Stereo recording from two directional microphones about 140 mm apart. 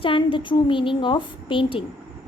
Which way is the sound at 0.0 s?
40° left (ahead or behind).